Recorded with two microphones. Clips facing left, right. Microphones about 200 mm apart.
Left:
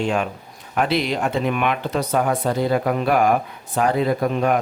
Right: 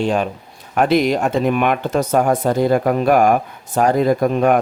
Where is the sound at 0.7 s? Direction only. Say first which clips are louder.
Right 6 dB; 45° right (ahead or behind).